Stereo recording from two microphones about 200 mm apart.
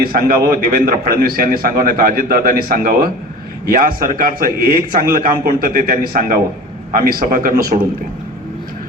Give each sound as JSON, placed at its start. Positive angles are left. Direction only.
{"t": 0.0, "sound": "a man's voice", "side_deg": -45}